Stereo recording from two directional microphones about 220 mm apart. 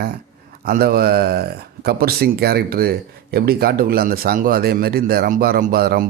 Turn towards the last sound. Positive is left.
turn(degrees=-45)  # may be behind; listen again after turning